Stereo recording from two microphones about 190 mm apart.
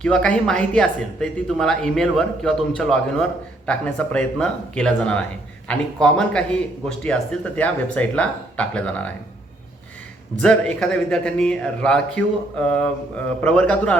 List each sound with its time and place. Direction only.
0.0 s speech: 5° left (ahead or behind)
10.4 s speech: 5° left (ahead or behind)